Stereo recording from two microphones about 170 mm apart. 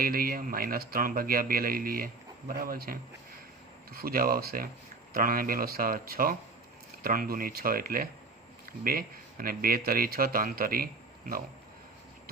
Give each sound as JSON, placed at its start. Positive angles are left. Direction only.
{"t": 0.0, "sound": "a man's voice", "side_deg": -60}